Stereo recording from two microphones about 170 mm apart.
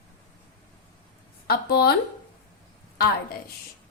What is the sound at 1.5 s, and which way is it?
Speech, 70° left (ahead or behind).